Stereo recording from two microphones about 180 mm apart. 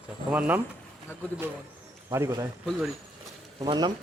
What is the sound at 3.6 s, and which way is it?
Speech, 25° right (ahead or behind).